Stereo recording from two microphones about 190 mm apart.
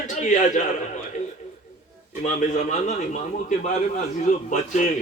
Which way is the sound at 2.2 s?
40° left (ahead or behind).